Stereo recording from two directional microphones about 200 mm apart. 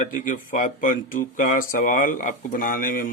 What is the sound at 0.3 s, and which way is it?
Speech, 40° left (ahead or behind).